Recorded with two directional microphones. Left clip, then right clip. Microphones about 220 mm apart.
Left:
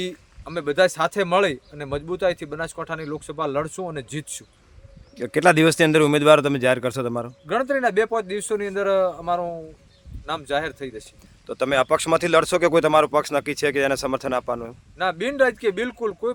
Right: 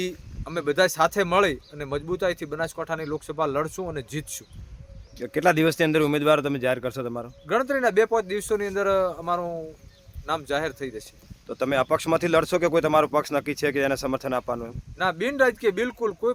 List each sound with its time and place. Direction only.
0.0 s speech: centre (ahead or behind)
5.2 s speech: 25° left (ahead or behind)
7.4 s speech: centre (ahead or behind)
11.4 s speech: 30° left (ahead or behind)
14.9 s speech: centre (ahead or behind)